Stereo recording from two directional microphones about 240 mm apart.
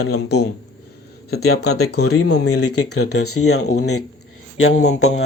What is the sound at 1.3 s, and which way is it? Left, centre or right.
Speech, left.